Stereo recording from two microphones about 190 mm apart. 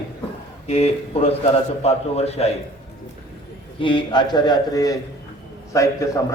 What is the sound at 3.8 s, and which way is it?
A man's voice, 25° left (ahead or behind).